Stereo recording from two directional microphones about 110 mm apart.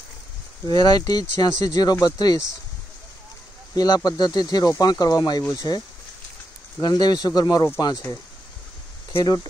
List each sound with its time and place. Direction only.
0.7 s speech: 35° left (ahead or behind)
3.7 s speech: 35° left (ahead or behind)
6.8 s speech: 40° left (ahead or behind)
9.2 s speech: 35° left (ahead or behind)